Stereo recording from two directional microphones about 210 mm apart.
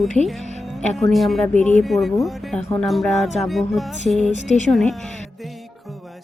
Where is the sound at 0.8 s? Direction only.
5° left (ahead or behind).